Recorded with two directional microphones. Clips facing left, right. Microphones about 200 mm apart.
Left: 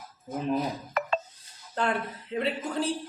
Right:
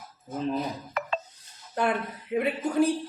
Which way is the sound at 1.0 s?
50° left (ahead or behind).